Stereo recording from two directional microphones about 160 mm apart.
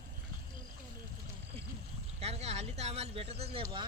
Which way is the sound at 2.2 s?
40° right (ahead or behind).